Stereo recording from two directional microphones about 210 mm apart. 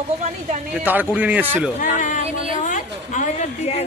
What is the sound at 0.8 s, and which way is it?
Speech, 10° right (ahead or behind).